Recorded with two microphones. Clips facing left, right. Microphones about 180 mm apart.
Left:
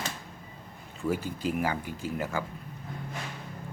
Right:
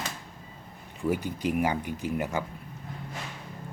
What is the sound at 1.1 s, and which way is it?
Speech, 15° right (ahead or behind).